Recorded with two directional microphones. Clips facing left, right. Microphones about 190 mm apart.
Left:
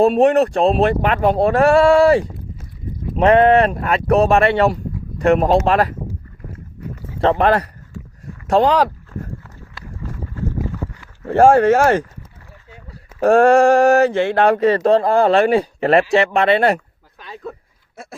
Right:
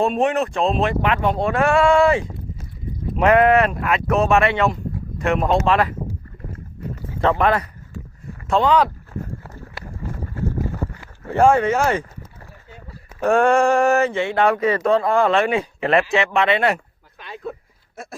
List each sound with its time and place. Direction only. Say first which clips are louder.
0.2 s speech: left 6 dB; 40° left (ahead or behind)
7.2 s speech: left 3 dB; 35° left (ahead or behind)
11.3 s speech: left 4 dB; 40° left (ahead or behind)
13.2 s speech: left 5 dB; 40° left (ahead or behind)